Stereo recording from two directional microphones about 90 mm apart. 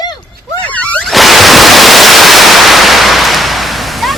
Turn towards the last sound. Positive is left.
turn(degrees=0)  # may be behind; listen again after turning